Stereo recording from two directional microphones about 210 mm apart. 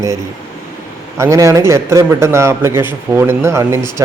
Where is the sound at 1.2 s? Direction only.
15° right (ahead or behind).